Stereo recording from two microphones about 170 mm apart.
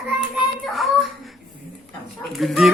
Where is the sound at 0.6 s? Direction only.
Centre (ahead or behind).